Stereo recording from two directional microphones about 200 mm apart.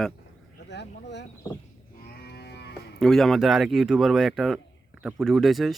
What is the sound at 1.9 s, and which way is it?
Cattle, 50° left (ahead or behind).